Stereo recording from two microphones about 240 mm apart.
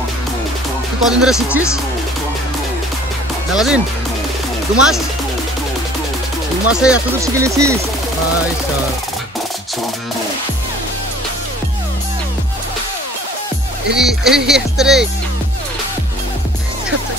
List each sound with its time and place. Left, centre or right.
1.0 s speech: centre
3.5 s speech: centre
6.7 s speech: centre
13.9 s speech: centre